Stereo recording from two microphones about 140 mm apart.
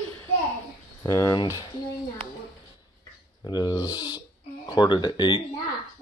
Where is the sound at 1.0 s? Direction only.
25° left (ahead or behind).